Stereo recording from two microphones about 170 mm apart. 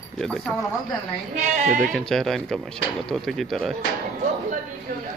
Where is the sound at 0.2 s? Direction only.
Centre (ahead or behind).